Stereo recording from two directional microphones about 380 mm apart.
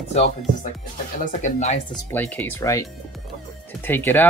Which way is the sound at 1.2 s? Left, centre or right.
Centre.